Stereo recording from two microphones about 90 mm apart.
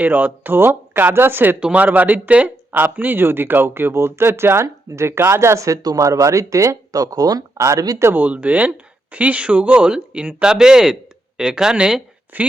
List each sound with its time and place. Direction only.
0.0 s speech: 20° right (ahead or behind); by 8.1 s 35° right (ahead or behind)
8.1 s speech: 15° right (ahead or behind)
12.3 s speech: 20° right (ahead or behind)